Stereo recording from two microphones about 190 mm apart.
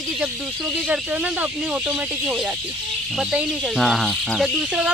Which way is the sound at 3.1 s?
Centre (ahead or behind).